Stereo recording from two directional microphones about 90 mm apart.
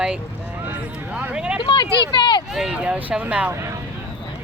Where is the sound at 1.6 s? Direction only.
60° left (ahead or behind).